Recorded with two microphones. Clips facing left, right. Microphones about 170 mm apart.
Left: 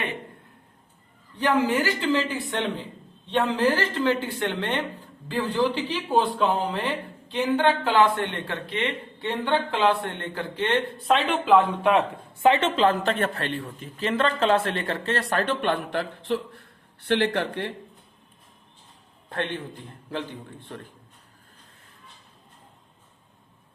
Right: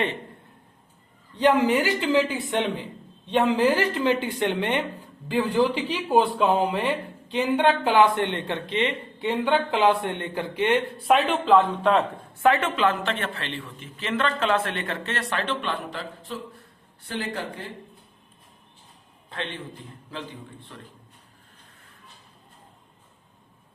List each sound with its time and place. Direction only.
1.4 s speech: 20° right (ahead or behind)
11.2 s speech: centre (ahead or behind)
11.8 s speech: 10° left (ahead or behind); by 17.7 s 70° left (ahead or behind)
20.7 s speech: 50° left (ahead or behind)